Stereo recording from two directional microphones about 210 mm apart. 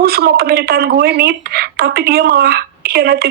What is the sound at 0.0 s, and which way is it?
Speech, 45° right (ahead or behind).